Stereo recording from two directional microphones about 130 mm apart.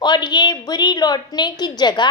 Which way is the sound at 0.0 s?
35° left (ahead or behind).